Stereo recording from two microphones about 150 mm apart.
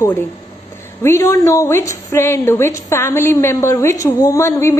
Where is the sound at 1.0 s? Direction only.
20° left (ahead or behind).